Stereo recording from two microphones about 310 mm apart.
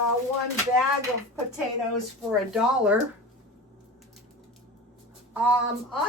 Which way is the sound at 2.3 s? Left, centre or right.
Centre.